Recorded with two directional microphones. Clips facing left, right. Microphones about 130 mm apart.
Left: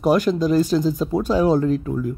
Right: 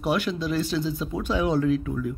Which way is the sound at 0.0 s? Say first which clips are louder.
Left 8 dB; 40° left (ahead or behind).